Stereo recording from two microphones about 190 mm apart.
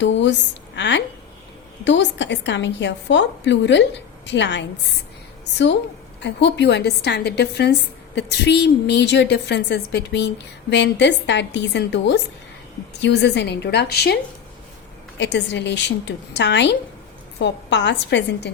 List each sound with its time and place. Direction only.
0.0 s a woman's voice: 70° left (ahead or behind)
6.2 s a woman's voice: 65° left (ahead or behind)
15.2 s a woman's voice: 65° left (ahead or behind)